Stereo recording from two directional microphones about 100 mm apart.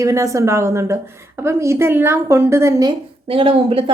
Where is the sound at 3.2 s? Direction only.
65° right (ahead or behind).